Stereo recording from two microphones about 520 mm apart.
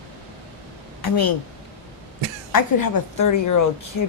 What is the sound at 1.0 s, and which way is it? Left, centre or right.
Speech, left.